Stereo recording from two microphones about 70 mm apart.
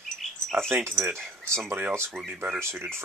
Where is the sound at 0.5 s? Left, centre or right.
Right.